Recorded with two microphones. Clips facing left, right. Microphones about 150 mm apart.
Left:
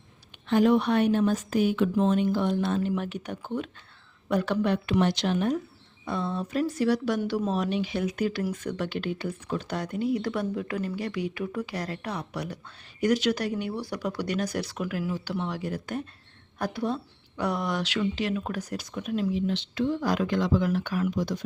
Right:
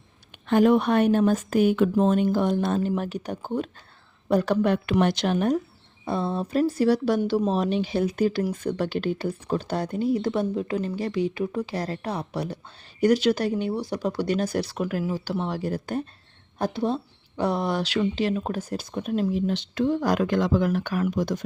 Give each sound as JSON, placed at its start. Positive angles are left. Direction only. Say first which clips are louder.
{"t": 0.3, "sound": "speech", "louder": "right 3 dB", "side_deg": -50}
{"t": 6.1, "sound": "speech", "louder": "right 4 dB", "side_deg": -35}